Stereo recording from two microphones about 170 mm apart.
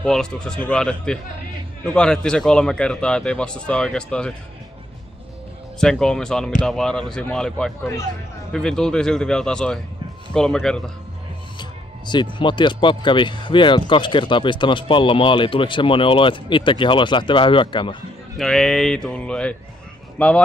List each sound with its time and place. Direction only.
0.0 s a man's voice: 5° left (ahead or behind)
5.8 s a man's voice: 5° left (ahead or behind)
12.1 s speech: 25° left (ahead or behind)
18.4 s a man's voice: centre (ahead or behind)